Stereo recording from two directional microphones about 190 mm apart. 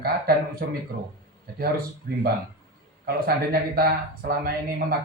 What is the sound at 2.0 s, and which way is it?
A man's voice, 45° right (ahead or behind).